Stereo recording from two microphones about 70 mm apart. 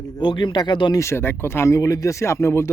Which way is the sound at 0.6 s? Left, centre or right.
Left.